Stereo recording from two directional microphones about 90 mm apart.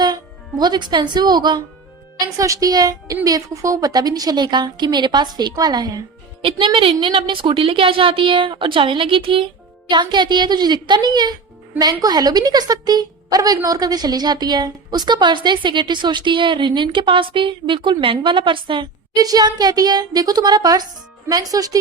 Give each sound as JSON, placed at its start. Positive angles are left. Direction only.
{"t": 0.6, "sound": "a woman's voice", "side_deg": -55}
{"t": 2.1, "sound": "a woman's voice", "side_deg": -40}
{"t": 6.7, "sound": "a woman's voice", "side_deg": -80}
{"t": 9.9, "sound": "a woman's voice", "side_deg": -55}
{"t": 19.1, "sound": "a woman's voice", "side_deg": -45}